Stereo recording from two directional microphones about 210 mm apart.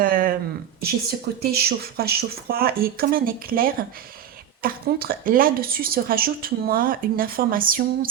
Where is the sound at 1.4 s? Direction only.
50° right (ahead or behind).